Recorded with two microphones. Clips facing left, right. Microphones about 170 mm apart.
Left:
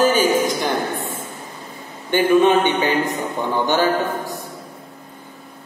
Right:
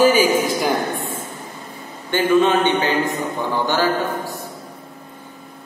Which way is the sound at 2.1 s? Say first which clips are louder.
Left 2 dB; 15° left (ahead or behind).